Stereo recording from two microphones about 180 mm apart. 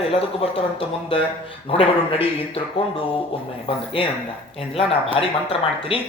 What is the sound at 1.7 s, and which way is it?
Speech, 30° left (ahead or behind).